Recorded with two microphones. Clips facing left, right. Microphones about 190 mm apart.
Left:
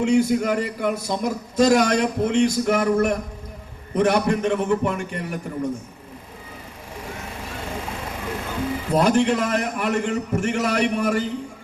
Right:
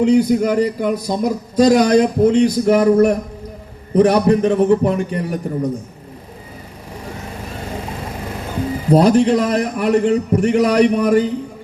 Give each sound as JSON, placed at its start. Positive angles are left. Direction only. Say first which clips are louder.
{"t": 0.0, "sound": "a man's voice", "louder": "right 5 dB", "side_deg": -35}
{"t": 8.9, "sound": "a man's voice", "louder": "right 7 dB", "side_deg": -35}